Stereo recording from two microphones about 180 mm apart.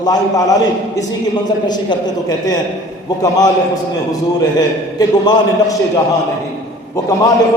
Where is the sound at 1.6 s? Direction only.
25° left (ahead or behind).